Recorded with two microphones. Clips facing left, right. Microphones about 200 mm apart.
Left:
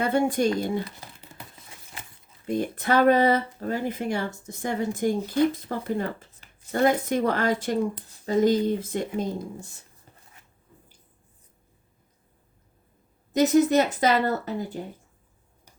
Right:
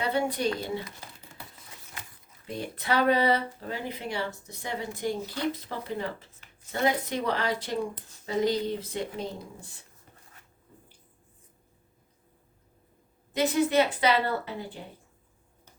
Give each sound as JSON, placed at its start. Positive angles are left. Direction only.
{"t": 0.0, "sound": "speech", "side_deg": 50}
{"t": 1.3, "sound": "a sound", "side_deg": 20}
{"t": 2.5, "sound": "speech", "side_deg": 50}
{"t": 13.3, "sound": "speech", "side_deg": 45}